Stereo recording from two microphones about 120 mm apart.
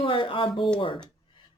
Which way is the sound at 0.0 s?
45° left (ahead or behind).